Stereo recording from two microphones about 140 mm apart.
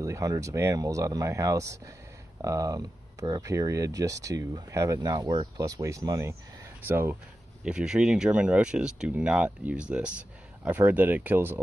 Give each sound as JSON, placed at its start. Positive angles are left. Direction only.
{"t": 0.0, "sound": "speech", "side_deg": -25}